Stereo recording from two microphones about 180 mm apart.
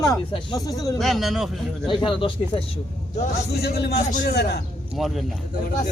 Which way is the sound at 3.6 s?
65° left (ahead or behind).